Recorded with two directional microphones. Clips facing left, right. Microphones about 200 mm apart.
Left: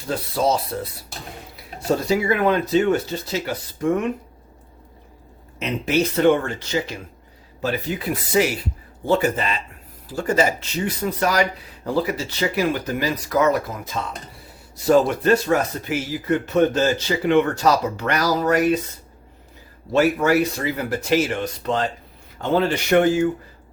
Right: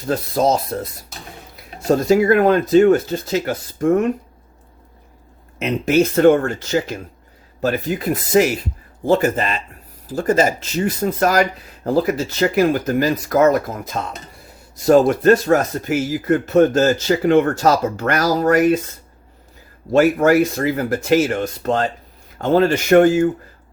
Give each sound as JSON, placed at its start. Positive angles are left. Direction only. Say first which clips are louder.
{"t": 0.1, "sound": "speech", "louder": "right 4 dB", "side_deg": -45}
{"t": 1.9, "sound": "speech", "louder": "right 6 dB", "side_deg": -50}
{"t": 5.5, "sound": "speech", "louder": "right 5 dB", "side_deg": -45}
{"t": 19.9, "sound": "speech", "louder": "right 4 dB", "side_deg": -50}